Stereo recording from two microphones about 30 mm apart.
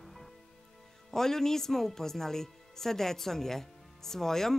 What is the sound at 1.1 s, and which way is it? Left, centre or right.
Speech, centre.